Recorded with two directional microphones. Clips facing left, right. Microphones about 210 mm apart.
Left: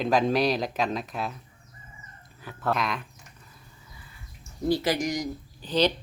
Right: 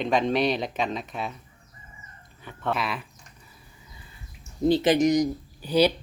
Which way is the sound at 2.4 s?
5° left (ahead or behind).